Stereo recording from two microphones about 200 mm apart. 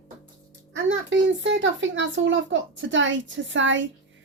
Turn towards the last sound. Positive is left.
turn(degrees=-70)  # may be behind; listen again after turning